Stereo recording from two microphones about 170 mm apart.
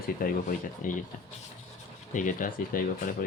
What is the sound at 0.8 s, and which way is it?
Speech, 50° left (ahead or behind).